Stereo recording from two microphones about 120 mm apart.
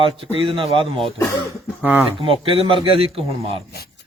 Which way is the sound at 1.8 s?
15° right (ahead or behind).